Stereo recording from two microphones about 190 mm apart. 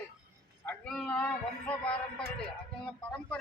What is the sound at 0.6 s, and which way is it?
Speech, 5° left (ahead or behind).